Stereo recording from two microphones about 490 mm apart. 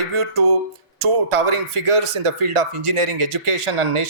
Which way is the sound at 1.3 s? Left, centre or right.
Right.